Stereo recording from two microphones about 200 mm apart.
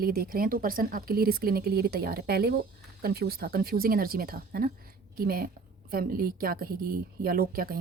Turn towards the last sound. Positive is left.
turn(degrees=-45)  # may be behind; listen again after turning